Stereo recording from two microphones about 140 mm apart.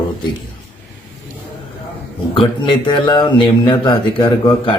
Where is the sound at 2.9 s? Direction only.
35° left (ahead or behind).